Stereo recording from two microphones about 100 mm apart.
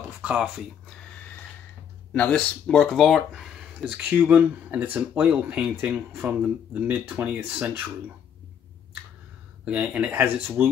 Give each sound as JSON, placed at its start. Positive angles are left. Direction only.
{"t": 0.2, "sound": "speech", "side_deg": -10}
{"t": 2.2, "sound": "speech", "side_deg": 5}
{"t": 4.3, "sound": "speech", "side_deg": -15}
{"t": 9.7, "sound": "speech", "side_deg": -10}